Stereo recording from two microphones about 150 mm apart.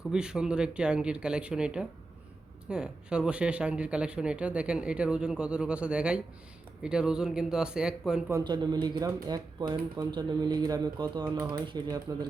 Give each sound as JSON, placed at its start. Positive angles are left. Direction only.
{"t": 0.1, "sound": "speech", "side_deg": -5}
{"t": 8.3, "sound": "speech", "side_deg": -25}